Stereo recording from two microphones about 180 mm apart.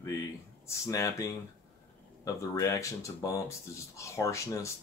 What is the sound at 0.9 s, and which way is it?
Speech, 20° left (ahead or behind).